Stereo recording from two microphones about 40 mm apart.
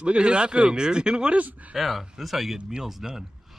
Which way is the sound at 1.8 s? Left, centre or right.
Centre.